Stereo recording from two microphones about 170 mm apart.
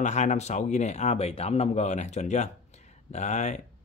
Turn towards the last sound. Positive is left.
turn(degrees=45)  # may be behind; listen again after turning